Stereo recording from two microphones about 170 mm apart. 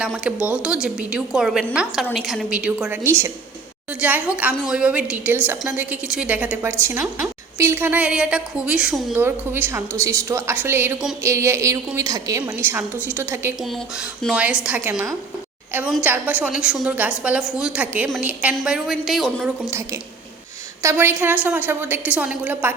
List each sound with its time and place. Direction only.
0.0 s a woman's voice: 5° right (ahead or behind)
20.8 s a woman's voice: 15° right (ahead or behind)